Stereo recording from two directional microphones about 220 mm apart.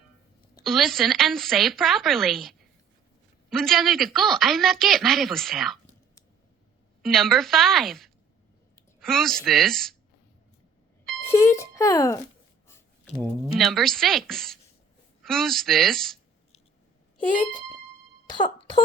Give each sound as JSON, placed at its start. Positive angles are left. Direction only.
{"t": 0.6, "sound": "speech", "side_deg": 0}
{"t": 7.0, "sound": "speech", "side_deg": 0}
{"t": 11.0, "sound": "speech", "side_deg": 10}
{"t": 13.1, "sound": "speech", "side_deg": 0}
{"t": 18.3, "sound": "speech", "side_deg": 20}